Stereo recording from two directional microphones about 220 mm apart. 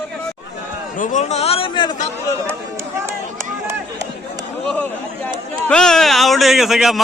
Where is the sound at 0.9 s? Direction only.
35° left (ahead or behind); by 2.0 s 20° left (ahead or behind).